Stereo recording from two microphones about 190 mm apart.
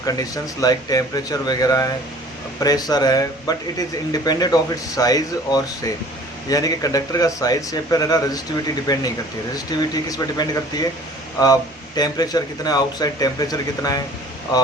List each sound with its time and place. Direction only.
0.0 s speech: 20° left (ahead or behind)